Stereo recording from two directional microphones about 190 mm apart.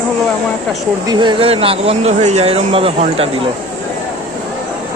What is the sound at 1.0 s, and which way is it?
Speech, 20° right (ahead or behind).